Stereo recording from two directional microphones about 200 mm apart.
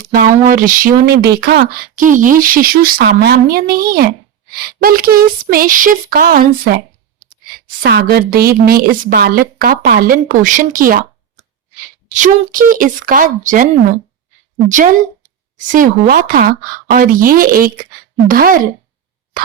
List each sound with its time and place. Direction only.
0.1 s a woman's voice: 45° right (ahead or behind)